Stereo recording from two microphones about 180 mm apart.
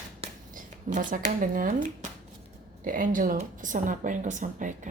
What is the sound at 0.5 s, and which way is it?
Speech, 45° right (ahead or behind).